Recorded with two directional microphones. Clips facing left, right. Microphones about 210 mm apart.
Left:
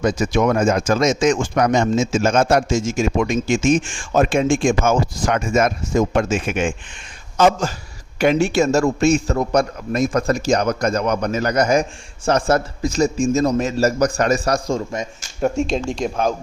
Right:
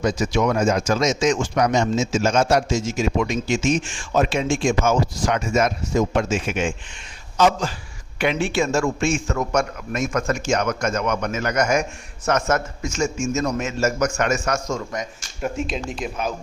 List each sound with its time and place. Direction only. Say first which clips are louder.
0.0 s a man's voice: left 3 dB; 55° left (ahead or behind)